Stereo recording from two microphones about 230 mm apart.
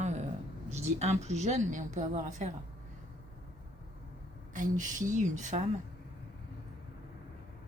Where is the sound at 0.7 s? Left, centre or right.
Right.